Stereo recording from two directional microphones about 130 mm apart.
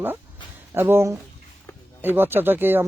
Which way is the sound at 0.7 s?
20° right (ahead or behind).